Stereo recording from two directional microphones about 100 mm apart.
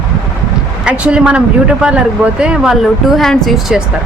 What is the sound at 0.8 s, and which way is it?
Speech, 10° right (ahead or behind).